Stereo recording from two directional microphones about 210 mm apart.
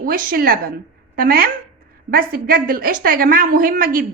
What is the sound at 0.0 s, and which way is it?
A woman's voice, 45° right (ahead or behind).